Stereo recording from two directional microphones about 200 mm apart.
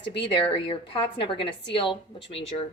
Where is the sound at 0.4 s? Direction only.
25° left (ahead or behind).